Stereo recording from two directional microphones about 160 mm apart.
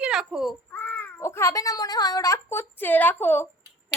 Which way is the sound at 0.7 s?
10° left (ahead or behind).